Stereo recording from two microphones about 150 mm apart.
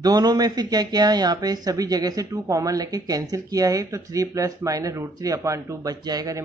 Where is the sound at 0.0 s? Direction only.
25° right (ahead or behind).